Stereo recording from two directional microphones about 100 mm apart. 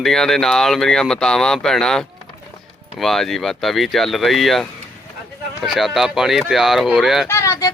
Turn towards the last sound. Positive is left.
turn(degrees=35)  # may be behind; listen again after turning